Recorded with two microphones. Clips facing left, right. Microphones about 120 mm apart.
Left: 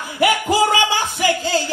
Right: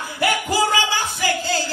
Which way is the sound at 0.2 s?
20° left (ahead or behind).